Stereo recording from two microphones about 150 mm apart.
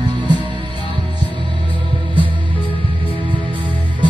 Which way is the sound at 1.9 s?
35° right (ahead or behind).